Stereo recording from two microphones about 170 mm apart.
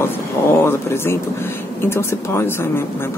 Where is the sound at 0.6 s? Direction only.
15° left (ahead or behind).